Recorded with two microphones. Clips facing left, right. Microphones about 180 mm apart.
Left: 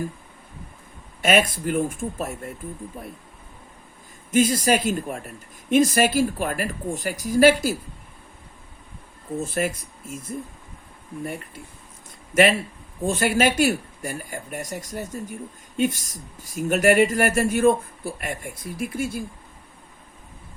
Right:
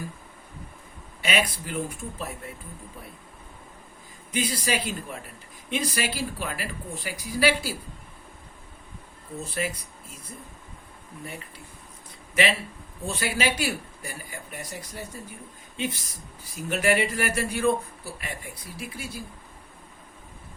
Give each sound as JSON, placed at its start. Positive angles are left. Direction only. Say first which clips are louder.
{"t": 1.2, "sound": "speech", "louder": "left 7 dB", "side_deg": 45}
{"t": 4.3, "sound": "speech", "louder": "left 9 dB", "side_deg": 45}
{"t": 9.4, "sound": "speech", "louder": "left 5 dB", "side_deg": 45}
{"t": 12.3, "sound": "speech", "louder": "left 7 dB", "side_deg": 45}